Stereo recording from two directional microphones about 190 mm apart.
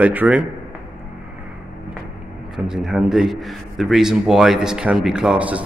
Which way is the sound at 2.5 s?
5° right (ahead or behind).